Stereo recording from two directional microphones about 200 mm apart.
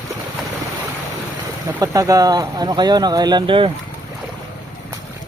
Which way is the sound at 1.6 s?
15° right (ahead or behind).